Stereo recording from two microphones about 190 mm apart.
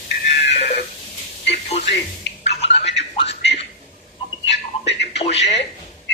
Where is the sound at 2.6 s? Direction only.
65° left (ahead or behind).